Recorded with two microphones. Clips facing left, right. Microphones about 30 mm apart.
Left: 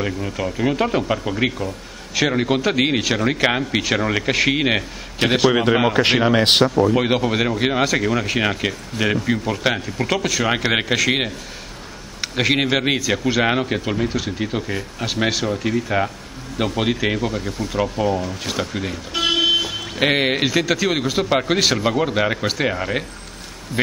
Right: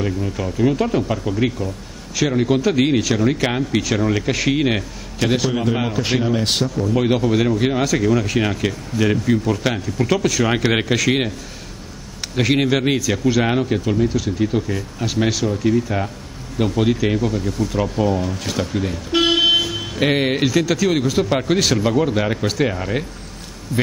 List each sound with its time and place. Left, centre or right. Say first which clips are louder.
0.0 s speech: right 1 dB; centre
5.5 s speech: left 4 dB; left
6.9 s speech: right 1 dB; left
12.2 s a sound: right 1 dB; centre
12.7 s speech: right 1 dB; centre
19.1 s vehicle: right 3 dB; centre
19.6 s speech: even; centre